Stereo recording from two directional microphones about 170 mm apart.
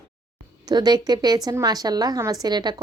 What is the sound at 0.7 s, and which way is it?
A woman's voice, 25° right (ahead or behind).